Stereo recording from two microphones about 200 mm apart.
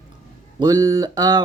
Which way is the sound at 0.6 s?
20° right (ahead or behind).